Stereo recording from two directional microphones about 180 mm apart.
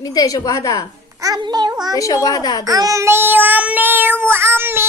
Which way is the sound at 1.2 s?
20° right (ahead or behind).